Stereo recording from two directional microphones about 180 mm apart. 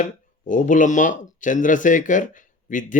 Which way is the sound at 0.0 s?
45° left (ahead or behind).